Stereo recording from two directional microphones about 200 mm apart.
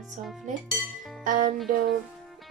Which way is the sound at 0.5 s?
40° right (ahead or behind).